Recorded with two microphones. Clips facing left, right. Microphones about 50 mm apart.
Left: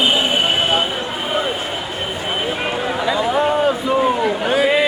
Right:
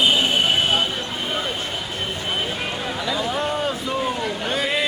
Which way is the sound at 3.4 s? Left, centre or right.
Centre.